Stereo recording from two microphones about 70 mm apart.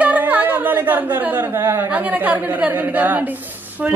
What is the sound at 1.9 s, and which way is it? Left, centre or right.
A woman's voice, right.